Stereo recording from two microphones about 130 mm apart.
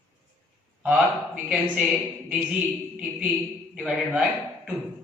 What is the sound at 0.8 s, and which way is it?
A man's voice, 10° right (ahead or behind).